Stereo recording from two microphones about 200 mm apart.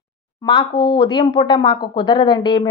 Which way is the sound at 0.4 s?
25° left (ahead or behind).